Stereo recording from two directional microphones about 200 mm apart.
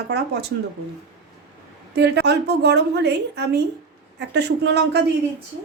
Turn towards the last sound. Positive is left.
turn(degrees=-55)  # may be behind; listen again after turning